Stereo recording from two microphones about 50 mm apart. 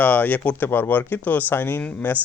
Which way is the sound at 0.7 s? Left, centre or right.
Left.